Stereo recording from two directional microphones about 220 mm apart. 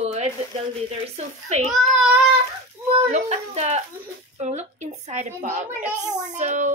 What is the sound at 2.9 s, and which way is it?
A woman's voice, 30° right (ahead or behind).